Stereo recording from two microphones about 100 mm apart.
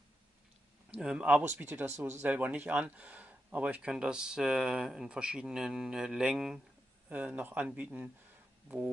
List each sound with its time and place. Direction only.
0.9 s speech: 10° right (ahead or behind)